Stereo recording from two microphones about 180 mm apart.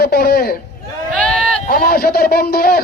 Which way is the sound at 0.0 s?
60° left (ahead or behind).